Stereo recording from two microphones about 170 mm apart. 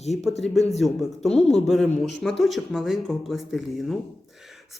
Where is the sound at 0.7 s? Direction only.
Centre (ahead or behind).